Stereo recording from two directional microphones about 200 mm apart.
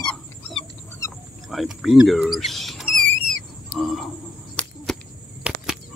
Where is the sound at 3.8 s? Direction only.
Centre (ahead or behind).